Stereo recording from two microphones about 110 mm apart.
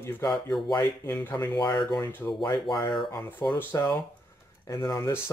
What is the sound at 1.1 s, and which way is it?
Speech, 20° left (ahead or behind).